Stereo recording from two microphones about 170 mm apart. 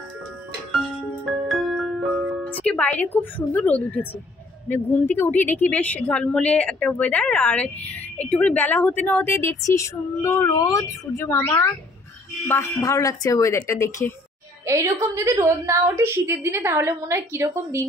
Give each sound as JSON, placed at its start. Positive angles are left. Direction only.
{"t": 1.2, "sound": "music", "side_deg": 0}
{"t": 2.4, "sound": "a woman's voice", "side_deg": 5}
{"t": 14.7, "sound": "a woman's voice", "side_deg": -15}